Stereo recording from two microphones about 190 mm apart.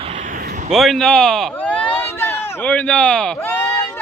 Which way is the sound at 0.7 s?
Centre (ahead or behind).